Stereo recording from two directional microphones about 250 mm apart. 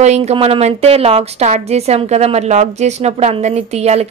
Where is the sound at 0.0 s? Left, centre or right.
Right.